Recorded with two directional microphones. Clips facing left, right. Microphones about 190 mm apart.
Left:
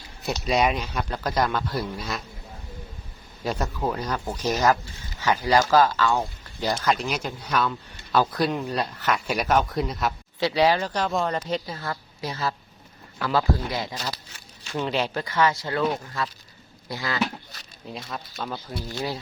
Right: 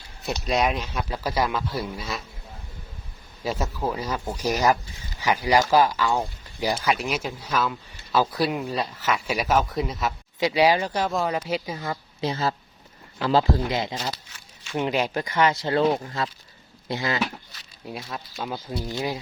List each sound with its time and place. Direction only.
0.2 s speech: centre (ahead or behind)
3.4 s speech: centre (ahead or behind)
10.4 s speech: 10° right (ahead or behind)
14.3 s crumpling: 35° left (ahead or behind)
14.8 s speech: 10° right (ahead or behind)
17.9 s speech: 10° right (ahead or behind)